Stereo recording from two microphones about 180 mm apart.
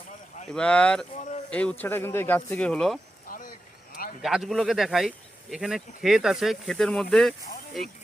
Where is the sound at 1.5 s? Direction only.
5° left (ahead or behind).